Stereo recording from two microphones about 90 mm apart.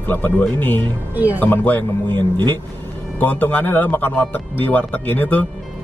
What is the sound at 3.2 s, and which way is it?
Speech, 15° left (ahead or behind).